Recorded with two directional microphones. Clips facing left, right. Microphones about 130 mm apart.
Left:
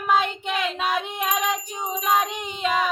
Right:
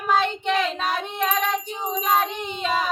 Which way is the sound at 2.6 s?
35° right (ahead or behind).